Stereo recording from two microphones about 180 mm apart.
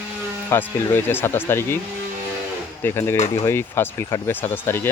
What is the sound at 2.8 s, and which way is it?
Speech, 15° left (ahead or behind).